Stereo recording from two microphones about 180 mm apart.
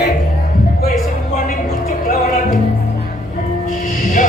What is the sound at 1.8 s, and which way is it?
Music, 55° left (ahead or behind).